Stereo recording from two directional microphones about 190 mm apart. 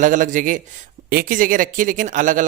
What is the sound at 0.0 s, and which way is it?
Speech, 40° right (ahead or behind).